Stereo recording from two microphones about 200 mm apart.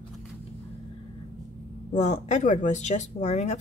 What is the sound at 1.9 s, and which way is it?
Speech, 35° left (ahead or behind).